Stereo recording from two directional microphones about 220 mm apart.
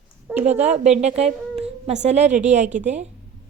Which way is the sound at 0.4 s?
30° right (ahead or behind).